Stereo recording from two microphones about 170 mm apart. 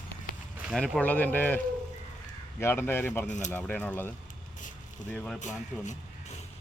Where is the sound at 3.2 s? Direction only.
45° left (ahead or behind).